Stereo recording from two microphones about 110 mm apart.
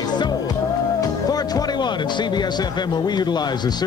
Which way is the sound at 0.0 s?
40° left (ahead or behind).